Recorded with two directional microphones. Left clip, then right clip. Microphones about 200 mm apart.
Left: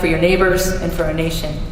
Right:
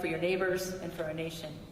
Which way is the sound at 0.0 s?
35° left (ahead or behind).